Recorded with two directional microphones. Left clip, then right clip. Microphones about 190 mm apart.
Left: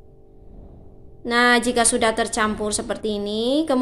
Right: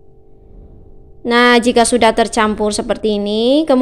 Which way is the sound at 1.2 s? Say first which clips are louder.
Right 7 dB; 45° right (ahead or behind).